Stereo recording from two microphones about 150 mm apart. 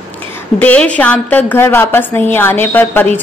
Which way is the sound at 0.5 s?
10° left (ahead or behind).